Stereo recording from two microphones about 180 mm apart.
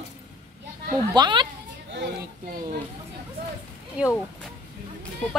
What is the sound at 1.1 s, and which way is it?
Speech, 25° right (ahead or behind).